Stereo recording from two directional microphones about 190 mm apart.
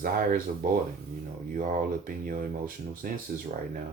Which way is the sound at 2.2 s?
45° right (ahead or behind).